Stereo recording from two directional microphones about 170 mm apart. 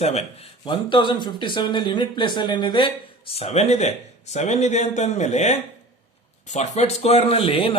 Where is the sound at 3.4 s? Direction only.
40° left (ahead or behind).